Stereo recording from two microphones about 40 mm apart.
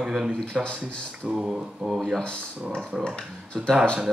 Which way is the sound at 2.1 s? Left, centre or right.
Left.